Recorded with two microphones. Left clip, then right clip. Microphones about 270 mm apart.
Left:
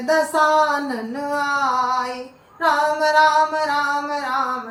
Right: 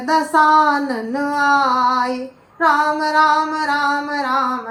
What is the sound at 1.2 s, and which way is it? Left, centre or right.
Female singing, centre.